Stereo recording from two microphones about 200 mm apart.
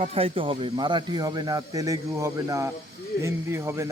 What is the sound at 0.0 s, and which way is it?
A man's voice, 30° right (ahead or behind).